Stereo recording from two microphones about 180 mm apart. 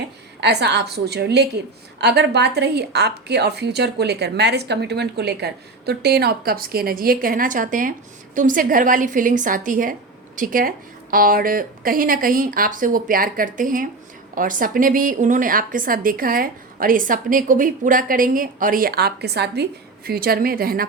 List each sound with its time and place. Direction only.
0.4 s a woman's voice: 70° right (ahead or behind)